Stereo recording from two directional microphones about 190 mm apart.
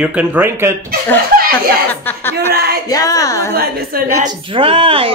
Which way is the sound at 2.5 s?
55° right (ahead or behind).